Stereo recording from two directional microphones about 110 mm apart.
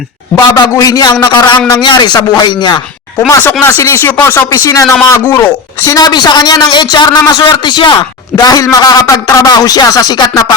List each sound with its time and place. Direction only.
0.3 s a man's voice: 35° left (ahead or behind)
3.8 s a man's voice: 25° left (ahead or behind)